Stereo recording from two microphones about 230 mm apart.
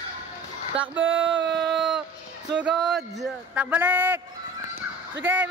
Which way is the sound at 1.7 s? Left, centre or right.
Centre.